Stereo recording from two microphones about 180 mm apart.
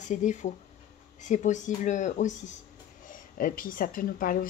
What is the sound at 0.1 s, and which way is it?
A woman's voice, 45° left (ahead or behind).